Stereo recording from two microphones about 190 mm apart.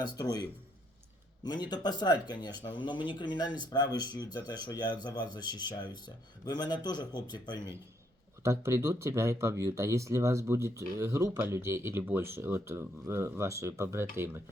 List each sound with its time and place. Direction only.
0.0 s speech: 20° left (ahead or behind)
1.5 s speech: 20° left (ahead or behind)
8.4 s speech: 15° right (ahead or behind)